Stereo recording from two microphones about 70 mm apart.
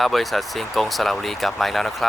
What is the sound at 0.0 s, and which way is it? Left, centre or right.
Speech, centre.